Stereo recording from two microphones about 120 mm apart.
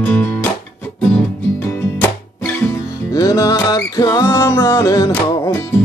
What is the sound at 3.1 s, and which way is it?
Music, 30° left (ahead or behind).